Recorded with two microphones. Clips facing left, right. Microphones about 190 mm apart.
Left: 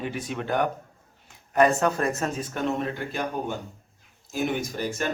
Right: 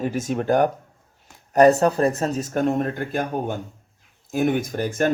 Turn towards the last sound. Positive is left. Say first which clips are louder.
# right 6 dB
turn(degrees=-50)  # may be behind; listen again after turning